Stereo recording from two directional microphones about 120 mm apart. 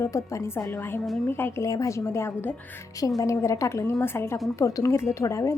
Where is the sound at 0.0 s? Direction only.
25° left (ahead or behind).